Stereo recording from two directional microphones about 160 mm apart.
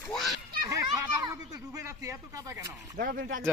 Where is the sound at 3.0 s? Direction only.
65° right (ahead or behind).